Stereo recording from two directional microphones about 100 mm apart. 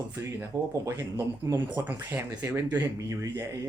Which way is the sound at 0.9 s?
30° right (ahead or behind).